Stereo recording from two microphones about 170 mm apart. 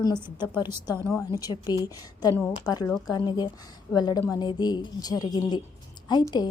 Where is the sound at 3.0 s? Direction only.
25° left (ahead or behind).